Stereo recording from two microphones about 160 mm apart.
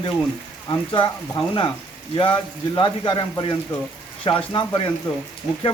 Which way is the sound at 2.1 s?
30° left (ahead or behind).